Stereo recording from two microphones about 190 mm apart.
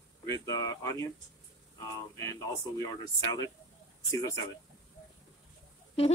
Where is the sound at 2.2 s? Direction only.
15° left (ahead or behind).